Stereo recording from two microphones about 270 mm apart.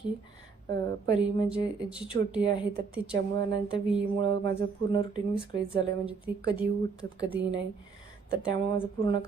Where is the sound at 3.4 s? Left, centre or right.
Centre.